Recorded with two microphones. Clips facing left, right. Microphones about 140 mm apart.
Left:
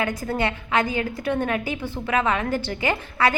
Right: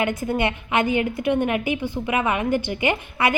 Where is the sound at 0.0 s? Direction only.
20° right (ahead or behind).